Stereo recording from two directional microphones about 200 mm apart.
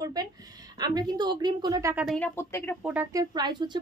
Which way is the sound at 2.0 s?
5° left (ahead or behind).